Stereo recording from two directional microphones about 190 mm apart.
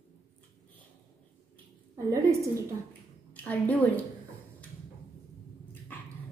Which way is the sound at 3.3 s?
10° left (ahead or behind).